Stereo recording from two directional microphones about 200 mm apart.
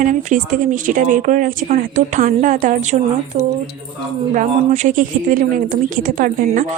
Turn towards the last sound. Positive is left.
turn(degrees=-45)  # may be behind; listen again after turning